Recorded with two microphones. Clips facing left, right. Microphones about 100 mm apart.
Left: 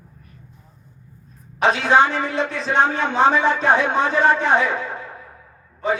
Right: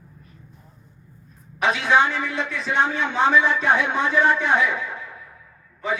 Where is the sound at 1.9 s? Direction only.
35° left (ahead or behind).